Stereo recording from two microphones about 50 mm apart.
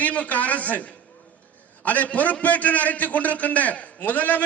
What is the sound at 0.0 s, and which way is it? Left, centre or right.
A man's voice, left.